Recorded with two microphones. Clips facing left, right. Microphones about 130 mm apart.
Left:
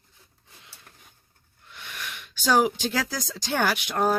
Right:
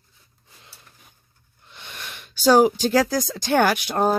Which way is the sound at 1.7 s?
25° right (ahead or behind).